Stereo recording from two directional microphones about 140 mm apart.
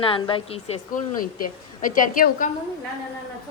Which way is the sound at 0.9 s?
80° left.